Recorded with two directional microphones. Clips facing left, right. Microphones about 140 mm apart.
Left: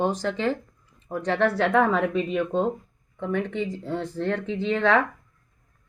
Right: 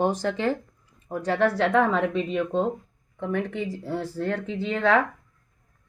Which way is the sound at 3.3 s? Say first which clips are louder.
Left 1 dB; 45° right (ahead or behind).